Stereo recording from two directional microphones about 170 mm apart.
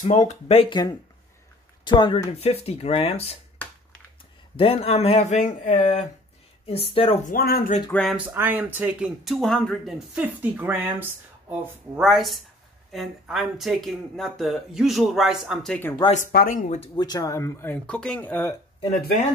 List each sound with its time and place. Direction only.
0.0 s speech: 45° left (ahead or behind)
4.6 s speech: 35° left (ahead or behind)
6.6 s speech: 35° left (ahead or behind)
7.2 s speech: 60° left (ahead or behind)
7.9 s speech: 5° left (ahead or behind)
8.3 s speech: 10° right (ahead or behind); by 15.9 s 5° left (ahead or behind)
16.3 s speech: 55° left (ahead or behind)
16.9 s speech: 25° left (ahead or behind)
18.9 s speech: 60° left (ahead or behind)